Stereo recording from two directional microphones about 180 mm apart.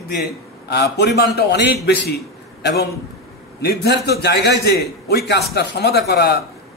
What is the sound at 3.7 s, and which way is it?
A man's voice, 65° left (ahead or behind).